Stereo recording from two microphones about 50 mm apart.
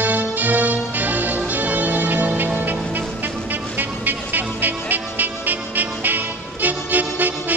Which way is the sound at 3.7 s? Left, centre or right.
Right.